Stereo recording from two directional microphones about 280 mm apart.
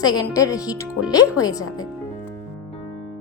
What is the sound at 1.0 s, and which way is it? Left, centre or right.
Speech, left.